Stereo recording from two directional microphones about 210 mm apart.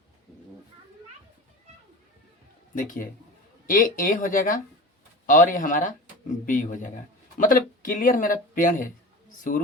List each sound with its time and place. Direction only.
2.7 s speech: 40° left (ahead or behind)